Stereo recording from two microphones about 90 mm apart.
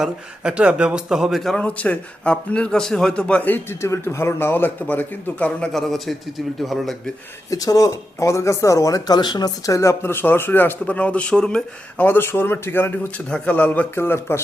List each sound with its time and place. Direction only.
0.0 s a man's voice: 10° right (ahead or behind)
1.5 s a man's voice: 15° left (ahead or behind)
7.5 s speech: 40° left (ahead or behind)
9.6 s speech: 35° left (ahead or behind)
10.0 s speech: 25° left (ahead or behind)
12.0 s speech: 25° left (ahead or behind)